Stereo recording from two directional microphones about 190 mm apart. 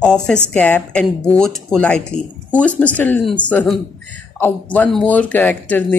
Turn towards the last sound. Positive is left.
turn(degrees=10)  # may be behind; listen again after turning